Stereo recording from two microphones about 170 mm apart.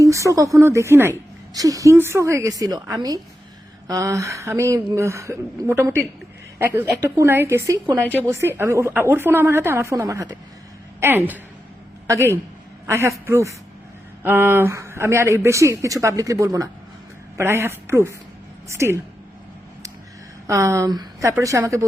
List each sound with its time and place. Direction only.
0.0 s a woman's voice: 20° right (ahead or behind)
20.5 s a woman's voice: 15° right (ahead or behind)